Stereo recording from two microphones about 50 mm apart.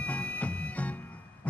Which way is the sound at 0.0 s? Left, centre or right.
Left.